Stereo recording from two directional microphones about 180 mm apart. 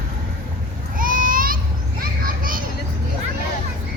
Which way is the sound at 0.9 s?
50° right (ahead or behind).